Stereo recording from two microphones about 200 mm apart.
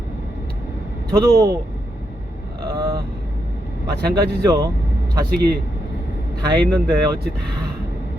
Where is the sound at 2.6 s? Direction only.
20° right (ahead or behind).